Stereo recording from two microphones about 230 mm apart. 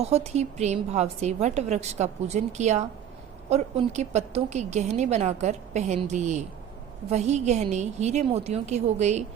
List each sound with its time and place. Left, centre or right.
0.0 s a woman's voice: right